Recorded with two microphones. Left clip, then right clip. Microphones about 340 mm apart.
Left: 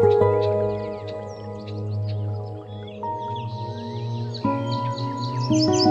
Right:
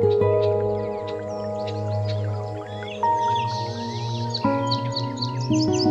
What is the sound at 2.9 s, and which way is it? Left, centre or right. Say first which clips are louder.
Music: right 8 dB; right.